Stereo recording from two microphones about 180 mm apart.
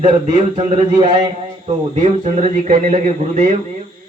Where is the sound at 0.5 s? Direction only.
35° right (ahead or behind).